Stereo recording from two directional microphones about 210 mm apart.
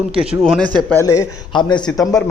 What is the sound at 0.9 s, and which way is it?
A man's voice, 15° left (ahead or behind).